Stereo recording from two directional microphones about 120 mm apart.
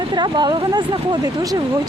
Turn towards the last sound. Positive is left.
turn(degrees=-35)  # may be behind; listen again after turning